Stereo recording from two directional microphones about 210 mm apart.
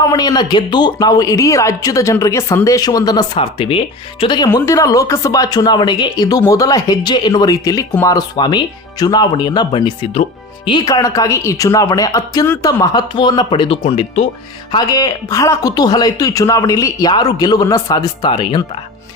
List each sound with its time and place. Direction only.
0.0 s speech: 20° left (ahead or behind)